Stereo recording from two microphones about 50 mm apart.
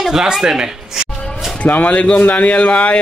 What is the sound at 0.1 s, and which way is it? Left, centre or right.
Speech, centre.